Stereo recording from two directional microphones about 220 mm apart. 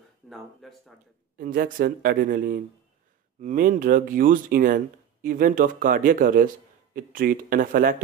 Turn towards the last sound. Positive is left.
turn(degrees=-40)  # may be behind; listen again after turning